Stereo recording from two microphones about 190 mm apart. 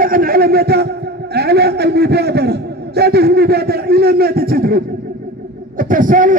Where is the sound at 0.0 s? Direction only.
50° right (ahead or behind).